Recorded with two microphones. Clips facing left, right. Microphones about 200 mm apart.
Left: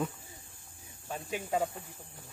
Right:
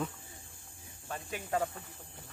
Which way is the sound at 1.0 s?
10° left (ahead or behind).